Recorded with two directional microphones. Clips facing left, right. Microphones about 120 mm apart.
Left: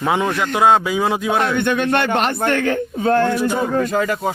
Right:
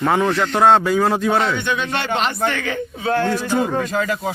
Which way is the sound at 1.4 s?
55° left (ahead or behind).